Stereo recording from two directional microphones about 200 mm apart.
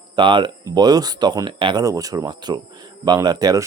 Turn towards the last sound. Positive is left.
turn(degrees=-20)  # may be behind; listen again after turning